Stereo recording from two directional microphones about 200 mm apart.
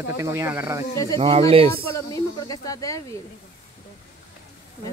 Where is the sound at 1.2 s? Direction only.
30° right (ahead or behind).